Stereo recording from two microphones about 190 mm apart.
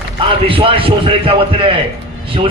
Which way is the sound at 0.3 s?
30° right (ahead or behind).